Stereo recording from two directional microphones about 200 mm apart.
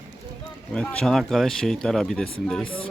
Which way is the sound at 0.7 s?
5° left (ahead or behind).